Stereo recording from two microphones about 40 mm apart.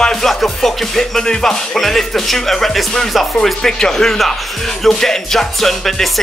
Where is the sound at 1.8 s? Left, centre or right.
Centre.